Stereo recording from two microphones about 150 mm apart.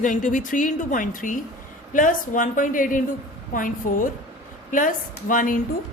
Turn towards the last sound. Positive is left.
turn(degrees=65)  # may be behind; listen again after turning